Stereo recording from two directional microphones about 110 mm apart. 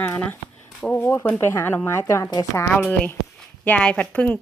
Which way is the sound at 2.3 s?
35° left (ahead or behind).